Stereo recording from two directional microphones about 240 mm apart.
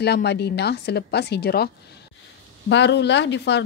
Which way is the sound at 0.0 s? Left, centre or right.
Left.